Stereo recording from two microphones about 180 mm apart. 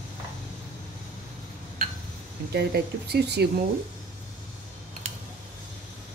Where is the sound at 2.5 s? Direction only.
65° right (ahead or behind).